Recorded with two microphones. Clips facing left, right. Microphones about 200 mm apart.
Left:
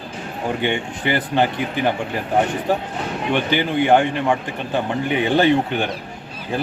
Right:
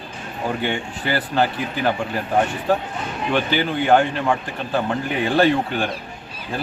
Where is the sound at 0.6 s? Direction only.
20° left (ahead or behind).